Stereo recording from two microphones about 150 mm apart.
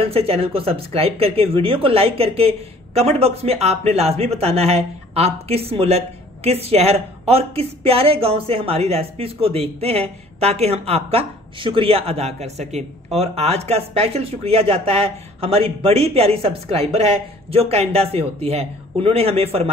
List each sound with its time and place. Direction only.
0.0 s speech: 40° right (ahead or behind)